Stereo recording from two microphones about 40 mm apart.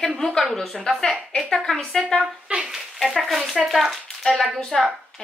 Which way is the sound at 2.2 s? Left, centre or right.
Centre.